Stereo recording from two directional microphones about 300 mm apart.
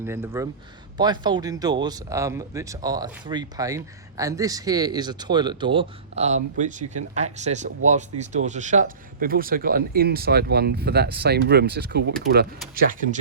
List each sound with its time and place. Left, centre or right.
0.0 s speech: centre; by 13.1 s right